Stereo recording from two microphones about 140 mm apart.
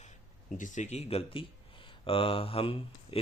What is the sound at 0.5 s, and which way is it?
Speech, 65° left (ahead or behind).